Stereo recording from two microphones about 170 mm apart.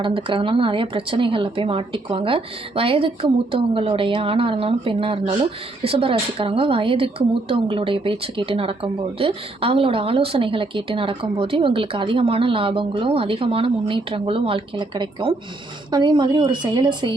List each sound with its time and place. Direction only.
0.0 s a woman's voice: 30° right (ahead or behind)